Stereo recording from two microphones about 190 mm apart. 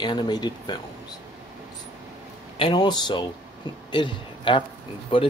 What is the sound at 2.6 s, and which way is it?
Speech, 25° left (ahead or behind).